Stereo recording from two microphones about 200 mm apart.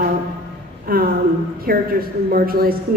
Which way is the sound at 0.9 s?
45° right (ahead or behind).